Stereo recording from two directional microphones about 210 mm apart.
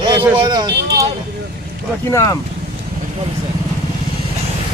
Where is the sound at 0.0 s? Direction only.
20° right (ahead or behind).